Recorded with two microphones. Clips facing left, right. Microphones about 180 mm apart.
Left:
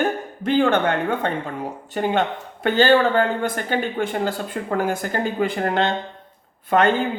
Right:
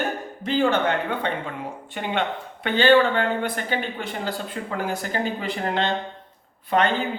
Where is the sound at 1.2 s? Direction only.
45° left (ahead or behind).